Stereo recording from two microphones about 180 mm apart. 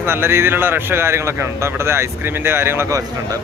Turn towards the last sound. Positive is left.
turn(degrees=-20)  # may be behind; listen again after turning